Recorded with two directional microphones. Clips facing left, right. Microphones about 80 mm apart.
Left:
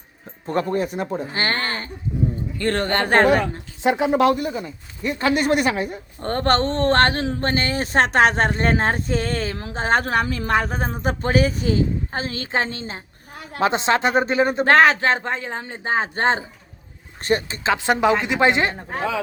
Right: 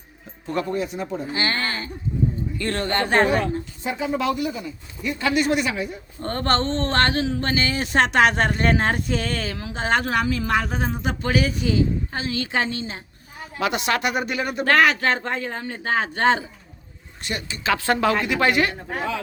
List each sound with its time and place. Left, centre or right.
0.4 s speech: left
3.8 s speech: left
4.4 s speech: left
17.7 s speech: centre